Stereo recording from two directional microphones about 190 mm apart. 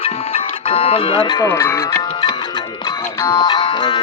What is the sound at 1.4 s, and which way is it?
Music, 15° left (ahead or behind).